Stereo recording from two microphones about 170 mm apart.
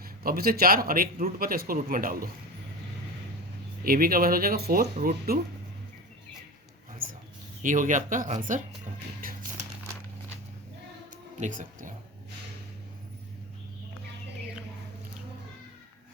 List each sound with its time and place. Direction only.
0.0 s a man's voice: 60° right (ahead or behind)
3.8 s a man's voice: 60° right (ahead or behind)
7.6 s speech: 50° right (ahead or behind)
9.2 s a sound: 55° right (ahead or behind)
11.3 s speech: 50° right (ahead or behind)